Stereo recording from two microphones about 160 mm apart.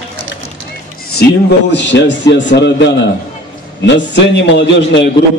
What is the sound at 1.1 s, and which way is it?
A man's voice, 85° left.